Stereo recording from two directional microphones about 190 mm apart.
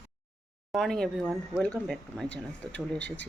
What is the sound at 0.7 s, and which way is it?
Speech, centre (ahead or behind).